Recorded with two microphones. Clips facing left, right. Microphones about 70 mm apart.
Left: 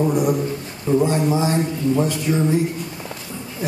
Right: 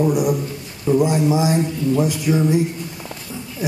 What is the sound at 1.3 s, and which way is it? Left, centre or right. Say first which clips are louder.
A man's voice: right 2 dB; centre.